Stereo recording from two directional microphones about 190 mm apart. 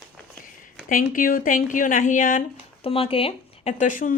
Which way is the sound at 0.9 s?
45° left (ahead or behind).